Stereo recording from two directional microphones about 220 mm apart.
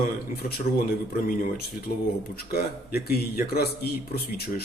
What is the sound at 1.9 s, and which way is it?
A man's voice, 40° left (ahead or behind).